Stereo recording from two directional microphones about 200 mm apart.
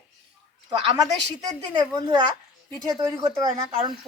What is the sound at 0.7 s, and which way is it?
Speech, 20° right (ahead or behind).